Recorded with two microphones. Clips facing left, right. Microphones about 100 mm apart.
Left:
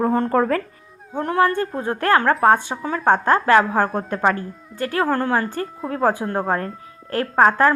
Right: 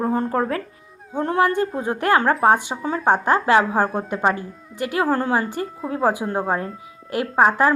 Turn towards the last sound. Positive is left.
turn(degrees=-10)  # may be behind; listen again after turning